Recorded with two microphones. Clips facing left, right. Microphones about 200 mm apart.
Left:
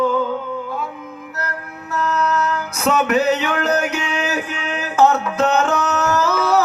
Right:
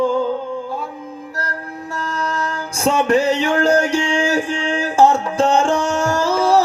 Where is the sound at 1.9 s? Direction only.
35° right (ahead or behind).